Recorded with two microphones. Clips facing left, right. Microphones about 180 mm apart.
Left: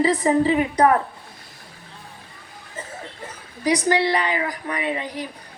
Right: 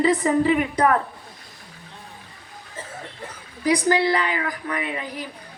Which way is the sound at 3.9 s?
25° left (ahead or behind).